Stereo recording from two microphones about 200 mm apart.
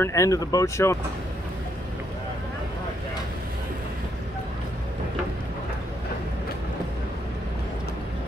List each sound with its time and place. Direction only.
0.0 s speech: 15° left (ahead or behind)